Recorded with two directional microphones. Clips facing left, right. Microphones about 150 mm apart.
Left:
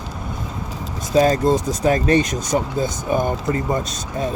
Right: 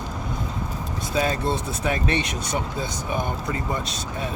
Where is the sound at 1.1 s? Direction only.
40° left (ahead or behind).